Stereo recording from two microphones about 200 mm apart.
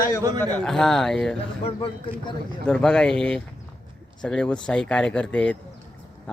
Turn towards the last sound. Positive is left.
turn(degrees=5)  # may be behind; listen again after turning